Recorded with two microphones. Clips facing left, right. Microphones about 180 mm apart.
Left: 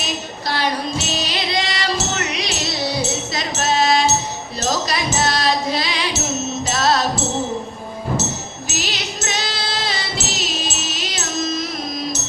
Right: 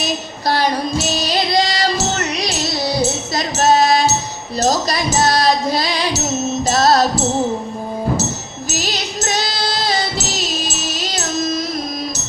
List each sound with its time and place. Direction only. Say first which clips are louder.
0.4 s music: right 5 dB; 40° right (ahead or behind)
8.7 s music: right 4 dB; 40° right (ahead or behind)